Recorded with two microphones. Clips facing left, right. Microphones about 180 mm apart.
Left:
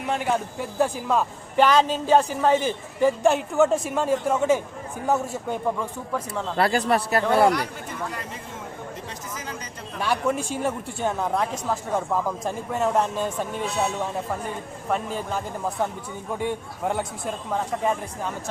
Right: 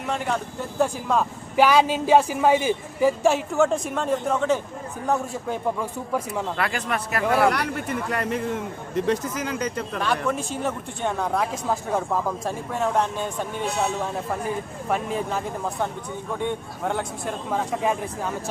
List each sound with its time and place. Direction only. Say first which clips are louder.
0.1 s a woman's voice: left 2 dB; 5° left (ahead or behind)
1.6 s a woman's voice: right 1 dB; 10° right (ahead or behind)
6.6 s speech: left 5 dB; 35° left (ahead or behind)
7.5 s a man's voice: right 2 dB; 65° right (ahead or behind)
10.0 s speech: left 2 dB; 10° left (ahead or behind)
11.5 s a woman's voice: right 1 dB; 10° right (ahead or behind)
14.8 s a woman's voice: right 1 dB; centre (ahead or behind)